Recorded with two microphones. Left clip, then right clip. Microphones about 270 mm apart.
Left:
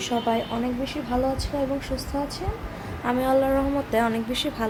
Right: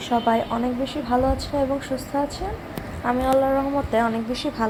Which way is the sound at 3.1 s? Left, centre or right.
Centre.